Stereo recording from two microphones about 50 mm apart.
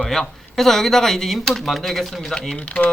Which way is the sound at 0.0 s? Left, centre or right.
Centre.